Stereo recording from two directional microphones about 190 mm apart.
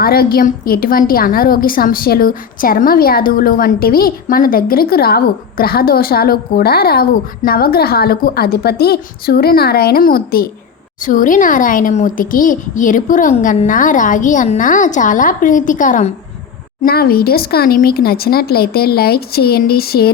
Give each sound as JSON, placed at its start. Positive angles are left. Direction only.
{"t": 0.0, "sound": "a woman's voice", "side_deg": 55}
{"t": 16.8, "sound": "a woman's voice", "side_deg": 55}